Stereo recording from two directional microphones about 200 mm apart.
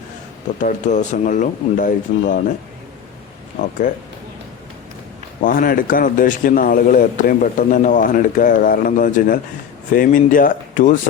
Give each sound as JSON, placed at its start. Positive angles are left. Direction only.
{"t": 0.6, "sound": "speech", "side_deg": 40}
{"t": 3.6, "sound": "speech", "side_deg": 40}
{"t": 5.4, "sound": "a man's voice", "side_deg": 45}